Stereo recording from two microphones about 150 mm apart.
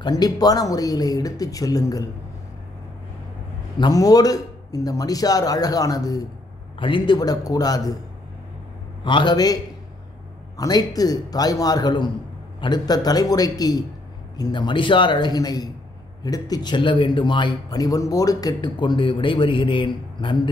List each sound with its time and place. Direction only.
0.0 s a man's voice: 25° left (ahead or behind)
3.7 s a man's voice: 25° left (ahead or behind)
9.0 s a man's voice: 30° left (ahead or behind)
10.6 s a man's voice: 25° left (ahead or behind)